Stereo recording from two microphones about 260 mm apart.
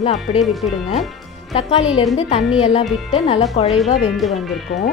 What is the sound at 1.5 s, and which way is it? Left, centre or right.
Speech, left.